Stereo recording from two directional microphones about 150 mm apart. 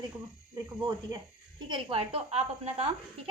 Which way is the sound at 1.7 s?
35° right (ahead or behind).